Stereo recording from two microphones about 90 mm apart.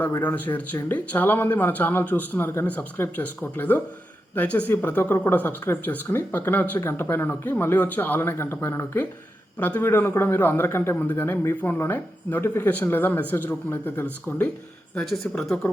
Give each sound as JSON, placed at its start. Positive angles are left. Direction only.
{"t": 0.2, "sound": "speech", "side_deg": 20}
{"t": 14.9, "sound": "speech", "side_deg": 5}